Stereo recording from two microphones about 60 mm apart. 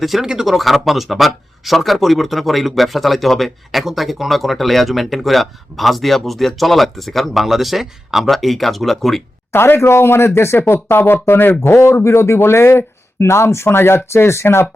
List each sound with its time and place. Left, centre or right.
0.0 s speech: centre
9.5 s a man's voice: left